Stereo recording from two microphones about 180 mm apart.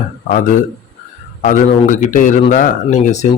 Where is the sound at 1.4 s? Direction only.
45° left (ahead or behind).